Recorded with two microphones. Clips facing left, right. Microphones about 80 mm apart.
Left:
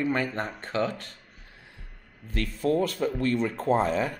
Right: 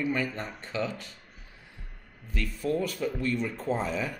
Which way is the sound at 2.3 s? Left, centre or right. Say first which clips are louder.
Left 4 dB; left.